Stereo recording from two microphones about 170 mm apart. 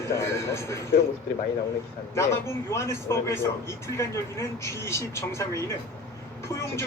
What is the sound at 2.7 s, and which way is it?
Speech, 15° left (ahead or behind).